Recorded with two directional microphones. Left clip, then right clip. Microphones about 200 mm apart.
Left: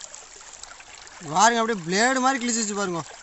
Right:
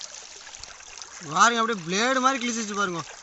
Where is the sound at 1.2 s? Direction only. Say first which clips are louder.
Left 1 dB; 20° left (ahead or behind).